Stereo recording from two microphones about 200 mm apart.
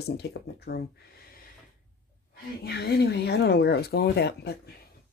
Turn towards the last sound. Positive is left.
turn(degrees=55)  # may be behind; listen again after turning